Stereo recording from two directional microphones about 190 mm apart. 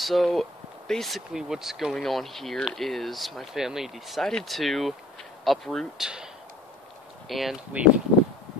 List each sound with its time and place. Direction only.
0.0 s speech: centre (ahead or behind)
7.2 s speech: centre (ahead or behind)